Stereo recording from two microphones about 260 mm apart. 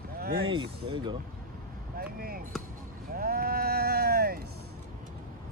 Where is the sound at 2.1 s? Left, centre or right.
Right.